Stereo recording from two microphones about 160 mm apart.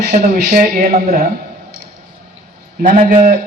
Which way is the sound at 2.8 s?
60° right (ahead or behind).